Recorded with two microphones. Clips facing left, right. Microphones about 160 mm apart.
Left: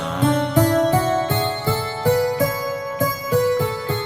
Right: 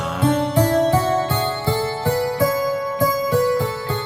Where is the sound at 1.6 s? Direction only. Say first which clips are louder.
Right 1 dB; 45° right (ahead or behind).